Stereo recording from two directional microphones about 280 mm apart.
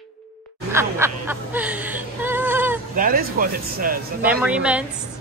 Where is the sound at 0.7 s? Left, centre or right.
Centre.